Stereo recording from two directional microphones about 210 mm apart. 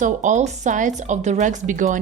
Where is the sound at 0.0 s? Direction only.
35° right (ahead or behind).